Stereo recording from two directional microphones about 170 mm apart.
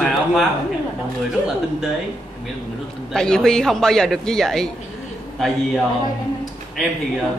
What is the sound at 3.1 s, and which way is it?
Speech, 5° left (ahead or behind).